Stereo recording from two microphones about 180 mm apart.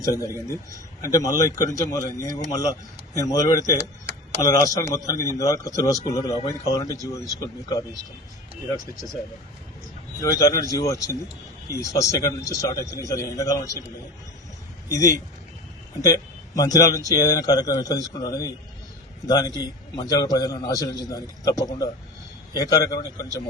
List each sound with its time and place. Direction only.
0.0 s a man's voice: 20° left (ahead or behind)
3.8 s a sound: 70° right (ahead or behind)
4.4 s a man's voice: 20° left (ahead or behind)
10.2 s a man's voice: 20° left (ahead or behind)
14.8 s a man's voice: 20° left (ahead or behind)